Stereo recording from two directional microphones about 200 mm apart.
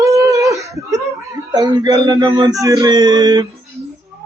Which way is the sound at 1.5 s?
20° right (ahead or behind).